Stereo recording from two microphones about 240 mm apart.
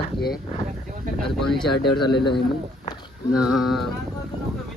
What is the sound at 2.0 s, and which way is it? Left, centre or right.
Speech, centre.